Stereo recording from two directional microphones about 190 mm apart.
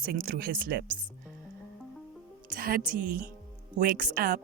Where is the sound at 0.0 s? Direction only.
45° right (ahead or behind).